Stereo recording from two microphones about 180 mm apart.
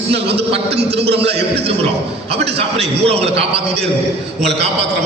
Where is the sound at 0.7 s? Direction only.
70° right (ahead or behind).